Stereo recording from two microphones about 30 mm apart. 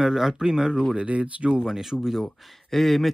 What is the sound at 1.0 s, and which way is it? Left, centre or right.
Speech, right.